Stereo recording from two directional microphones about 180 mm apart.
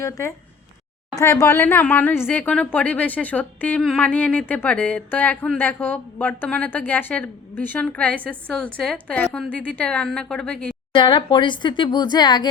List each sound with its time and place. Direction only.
0.0 s a woman's voice: 15° left (ahead or behind)
10.9 s speech: 25° left (ahead or behind)